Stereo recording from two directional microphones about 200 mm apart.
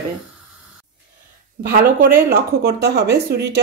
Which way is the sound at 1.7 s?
45° right (ahead or behind).